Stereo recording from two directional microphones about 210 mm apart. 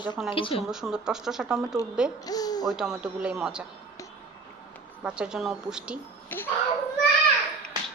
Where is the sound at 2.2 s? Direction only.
20° left (ahead or behind).